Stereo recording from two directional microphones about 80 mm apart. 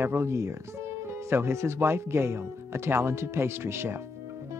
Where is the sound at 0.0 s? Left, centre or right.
Right.